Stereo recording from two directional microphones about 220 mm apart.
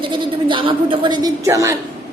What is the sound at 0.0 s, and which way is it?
A woman's voice, 20° right (ahead or behind).